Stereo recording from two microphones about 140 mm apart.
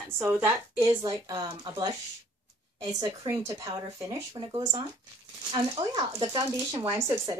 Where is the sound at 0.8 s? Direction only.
30° right (ahead or behind).